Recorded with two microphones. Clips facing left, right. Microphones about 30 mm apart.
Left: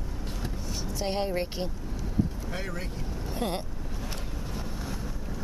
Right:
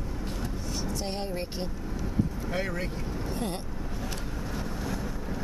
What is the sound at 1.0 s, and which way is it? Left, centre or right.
Speech, left.